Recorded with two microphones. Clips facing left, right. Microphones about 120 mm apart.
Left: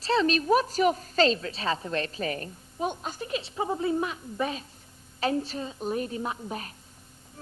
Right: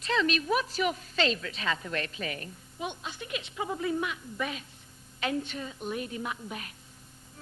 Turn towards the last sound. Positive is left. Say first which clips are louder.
# left 4 dB
turn(degrees=35)  # may be behind; listen again after turning